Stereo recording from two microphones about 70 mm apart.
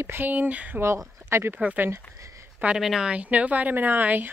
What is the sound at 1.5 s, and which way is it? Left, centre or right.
Speech, right.